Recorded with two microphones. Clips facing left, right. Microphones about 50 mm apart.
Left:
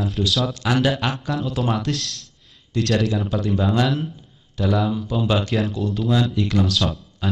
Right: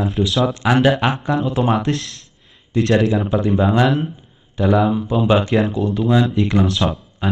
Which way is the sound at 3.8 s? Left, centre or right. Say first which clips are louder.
Right 5 dB; centre.